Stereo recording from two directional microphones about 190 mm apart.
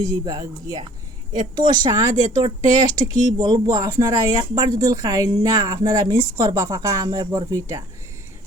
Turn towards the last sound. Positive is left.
turn(degrees=-15)  # may be behind; listen again after turning